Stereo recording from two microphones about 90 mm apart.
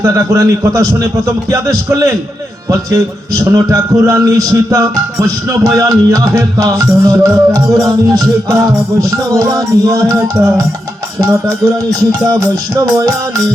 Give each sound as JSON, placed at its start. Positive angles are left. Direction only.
{"t": 0.0, "sound": "a man's voice", "side_deg": -35}